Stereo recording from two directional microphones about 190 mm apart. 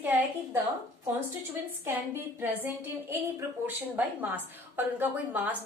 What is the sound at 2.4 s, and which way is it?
Speech, 10° right (ahead or behind).